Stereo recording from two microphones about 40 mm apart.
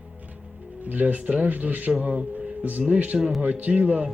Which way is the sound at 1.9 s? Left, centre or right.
Centre.